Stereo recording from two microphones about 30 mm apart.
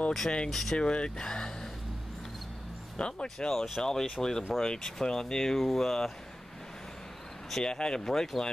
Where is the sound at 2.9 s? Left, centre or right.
Left.